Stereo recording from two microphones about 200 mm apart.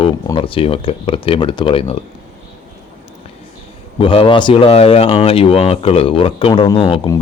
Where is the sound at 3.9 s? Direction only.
25° left (ahead or behind).